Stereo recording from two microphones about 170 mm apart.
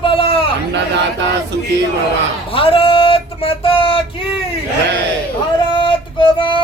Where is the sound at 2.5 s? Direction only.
35° left (ahead or behind).